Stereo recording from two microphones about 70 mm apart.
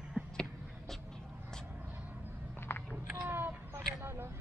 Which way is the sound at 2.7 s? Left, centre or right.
Left.